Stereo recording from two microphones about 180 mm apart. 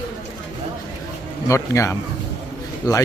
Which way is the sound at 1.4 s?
15° left (ahead or behind).